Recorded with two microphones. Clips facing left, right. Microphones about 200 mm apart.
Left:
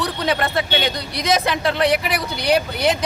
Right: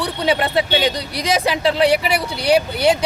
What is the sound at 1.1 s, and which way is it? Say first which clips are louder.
Speech: right 1 dB; 30° right (ahead or behind).